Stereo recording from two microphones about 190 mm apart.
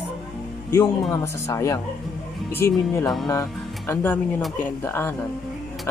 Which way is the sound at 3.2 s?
15° left (ahead or behind).